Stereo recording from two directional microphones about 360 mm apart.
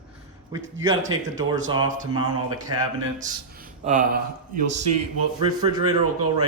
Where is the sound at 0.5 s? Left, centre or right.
Centre.